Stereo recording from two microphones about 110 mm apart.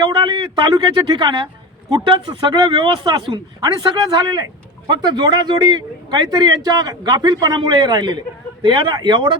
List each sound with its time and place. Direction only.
0.0 s a man's voice: 45° right (ahead or behind)